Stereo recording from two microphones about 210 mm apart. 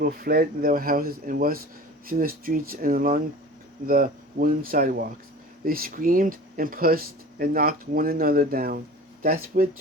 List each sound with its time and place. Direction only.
0.0 s speech: 45° right (ahead or behind)